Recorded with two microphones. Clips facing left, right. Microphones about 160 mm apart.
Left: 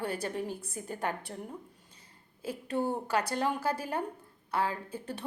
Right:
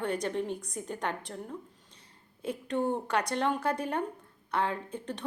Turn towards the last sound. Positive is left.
turn(degrees=10)  # may be behind; listen again after turning